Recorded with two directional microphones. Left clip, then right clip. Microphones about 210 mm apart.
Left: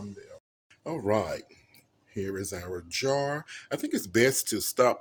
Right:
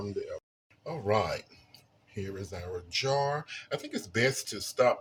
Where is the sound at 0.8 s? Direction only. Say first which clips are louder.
Left 1 dB; 45° left (ahead or behind).